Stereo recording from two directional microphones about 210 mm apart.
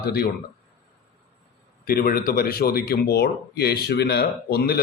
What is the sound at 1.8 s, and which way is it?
A man's voice, 45° left (ahead or behind).